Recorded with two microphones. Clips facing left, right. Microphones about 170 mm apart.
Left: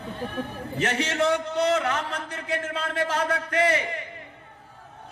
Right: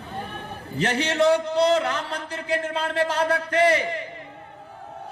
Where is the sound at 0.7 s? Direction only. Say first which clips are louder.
Right 3 dB; 30° right (ahead or behind).